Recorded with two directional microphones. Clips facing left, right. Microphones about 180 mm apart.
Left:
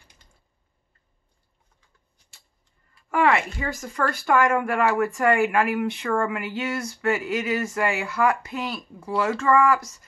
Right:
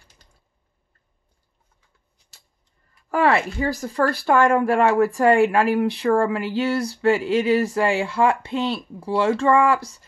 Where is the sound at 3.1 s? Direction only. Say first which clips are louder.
Right 2 dB; 35° right (ahead or behind).